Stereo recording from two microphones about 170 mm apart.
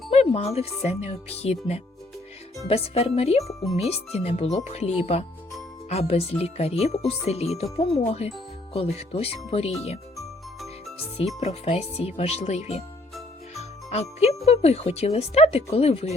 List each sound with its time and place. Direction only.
0.1 s speech: 40° left (ahead or behind)
10.2 s jingle: centre (ahead or behind)
11.3 s speech: 40° left (ahead or behind)
13.5 s jingle: 40° left (ahead or behind)
14.4 s speech: 40° left (ahead or behind)